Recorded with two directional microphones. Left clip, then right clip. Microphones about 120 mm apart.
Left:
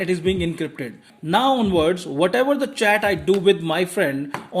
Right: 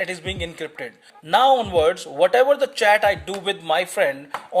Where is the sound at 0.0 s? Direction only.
25° right (ahead or behind).